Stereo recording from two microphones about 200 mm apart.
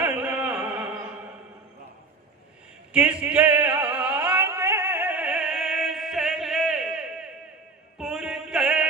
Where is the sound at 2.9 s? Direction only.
5° right (ahead or behind).